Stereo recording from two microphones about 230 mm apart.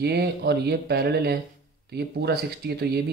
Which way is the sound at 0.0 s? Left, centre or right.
Right.